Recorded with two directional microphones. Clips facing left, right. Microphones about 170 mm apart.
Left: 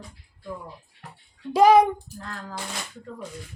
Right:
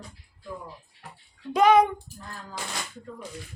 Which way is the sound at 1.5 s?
35° left (ahead or behind).